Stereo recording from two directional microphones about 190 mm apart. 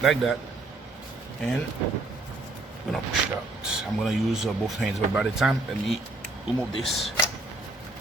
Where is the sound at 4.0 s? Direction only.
Centre (ahead or behind).